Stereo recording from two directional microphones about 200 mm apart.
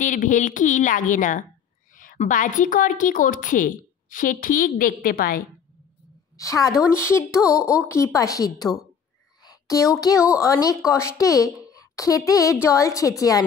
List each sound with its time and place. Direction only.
0.0 s a woman's voice: 40° left (ahead or behind)
6.3 s a woman's voice: 15° left (ahead or behind)